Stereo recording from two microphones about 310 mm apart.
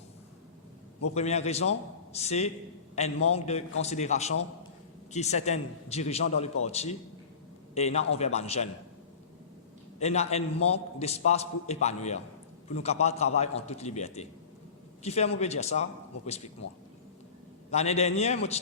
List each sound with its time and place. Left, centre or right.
1.1 s a man's voice: left
10.0 s a man's voice: left
17.7 s a man's voice: left